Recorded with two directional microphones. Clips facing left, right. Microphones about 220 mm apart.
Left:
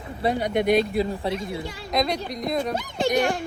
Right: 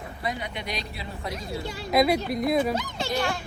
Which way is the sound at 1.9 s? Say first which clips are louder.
Right 3 dB; 5° right (ahead or behind).